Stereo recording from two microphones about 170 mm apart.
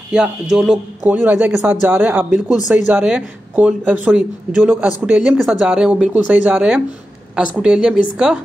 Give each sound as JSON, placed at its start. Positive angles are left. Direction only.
{"t": 0.1, "sound": "speech", "side_deg": -5}